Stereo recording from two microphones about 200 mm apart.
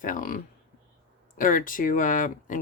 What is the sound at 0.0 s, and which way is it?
Speech, 45° left (ahead or behind).